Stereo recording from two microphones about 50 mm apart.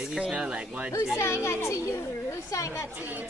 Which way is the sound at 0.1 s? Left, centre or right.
Centre.